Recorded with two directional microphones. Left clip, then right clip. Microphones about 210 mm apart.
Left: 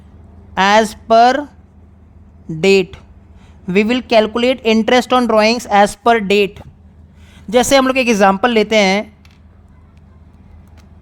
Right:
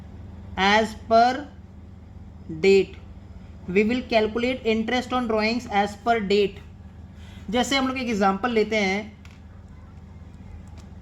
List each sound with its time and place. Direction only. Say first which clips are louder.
0.5 s a woman's voice: left 9 dB; 45° left (ahead or behind)
2.6 s a woman's voice: left 6 dB; 50° left (ahead or behind)